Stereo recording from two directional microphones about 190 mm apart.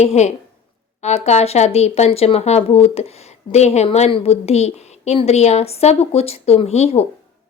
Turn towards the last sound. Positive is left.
turn(degrees=35)  # may be behind; listen again after turning